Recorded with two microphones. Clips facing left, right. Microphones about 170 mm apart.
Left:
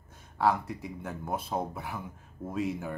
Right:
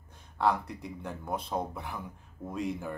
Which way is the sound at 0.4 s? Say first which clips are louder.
Left 1 dB; 5° left (ahead or behind).